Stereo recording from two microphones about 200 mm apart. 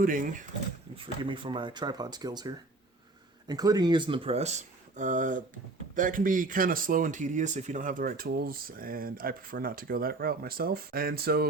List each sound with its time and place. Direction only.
0.0 s speech: 45° right (ahead or behind)
0.9 s speech: 25° right (ahead or behind); by 11.4 s 50° right (ahead or behind)